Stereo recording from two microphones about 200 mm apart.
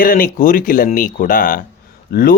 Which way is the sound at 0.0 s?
45° left (ahead or behind).